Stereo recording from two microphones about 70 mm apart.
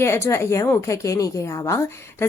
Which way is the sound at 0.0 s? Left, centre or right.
Left.